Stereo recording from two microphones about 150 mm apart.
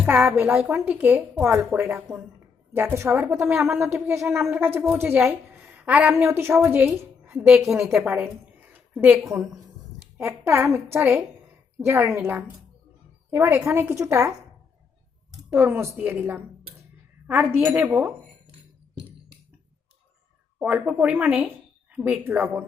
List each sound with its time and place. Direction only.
0.0 s a woman's voice: 15° right (ahead or behind)
3.7 s a woman's voice: 5° right (ahead or behind)
13.3 s a woman's voice: 15° right (ahead or behind)
15.4 s a woman's voice: 15° right (ahead or behind)
20.6 s a woman's voice: 10° right (ahead or behind)